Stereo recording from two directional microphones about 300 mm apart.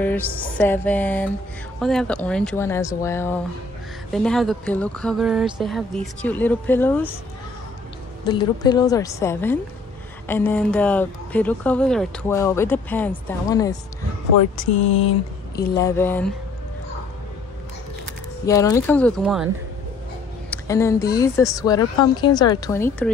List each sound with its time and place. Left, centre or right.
0.0 s a woman's voice: centre
8.2 s a woman's voice: centre
14.6 s a sound: left
15.5 s speech: centre
18.4 s a woman's voice: centre